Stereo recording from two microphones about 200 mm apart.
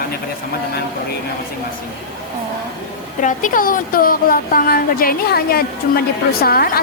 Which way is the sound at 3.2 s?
40° left (ahead or behind).